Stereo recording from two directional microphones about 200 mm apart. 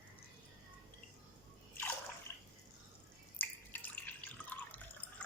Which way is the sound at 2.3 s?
15° left (ahead or behind).